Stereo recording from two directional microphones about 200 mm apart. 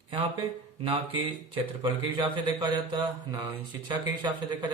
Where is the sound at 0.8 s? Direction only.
25° right (ahead or behind).